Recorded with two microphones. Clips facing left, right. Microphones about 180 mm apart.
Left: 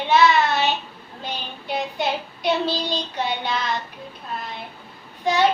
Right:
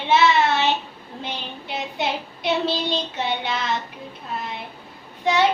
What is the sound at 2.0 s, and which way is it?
Child singing, 25° right (ahead or behind).